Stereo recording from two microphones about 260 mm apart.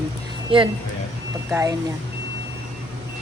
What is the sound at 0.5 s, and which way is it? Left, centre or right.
Speech, right.